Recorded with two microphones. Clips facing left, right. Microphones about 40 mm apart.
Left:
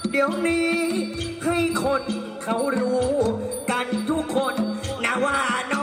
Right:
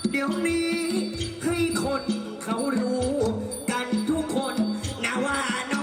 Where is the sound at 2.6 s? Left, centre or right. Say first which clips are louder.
Left 3 dB; left.